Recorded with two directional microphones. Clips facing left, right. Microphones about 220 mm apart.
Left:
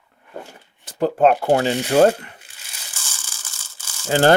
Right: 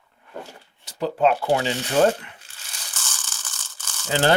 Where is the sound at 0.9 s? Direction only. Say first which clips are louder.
Left 4 dB; 50° left (ahead or behind).